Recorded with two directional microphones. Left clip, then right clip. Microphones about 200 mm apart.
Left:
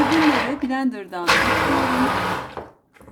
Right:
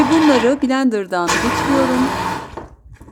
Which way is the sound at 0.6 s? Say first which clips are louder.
Right 7 dB; 40° right (ahead or behind).